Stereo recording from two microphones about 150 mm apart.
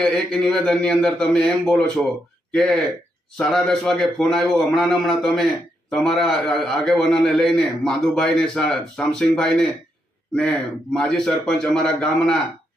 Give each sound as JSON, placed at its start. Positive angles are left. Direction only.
{"t": 0.0, "sound": "a man's voice", "side_deg": 5}
{"t": 10.9, "sound": "a man's voice", "side_deg": 5}